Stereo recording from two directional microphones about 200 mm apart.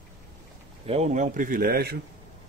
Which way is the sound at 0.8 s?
30° right (ahead or behind).